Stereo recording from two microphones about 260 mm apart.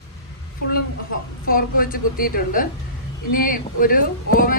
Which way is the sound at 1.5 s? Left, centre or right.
Left.